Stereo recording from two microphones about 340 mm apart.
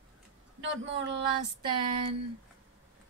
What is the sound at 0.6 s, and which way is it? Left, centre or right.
Speech, right.